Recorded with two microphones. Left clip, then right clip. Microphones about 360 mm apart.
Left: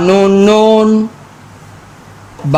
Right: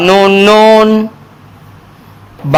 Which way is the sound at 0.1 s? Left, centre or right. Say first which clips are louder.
Right 3 dB; right.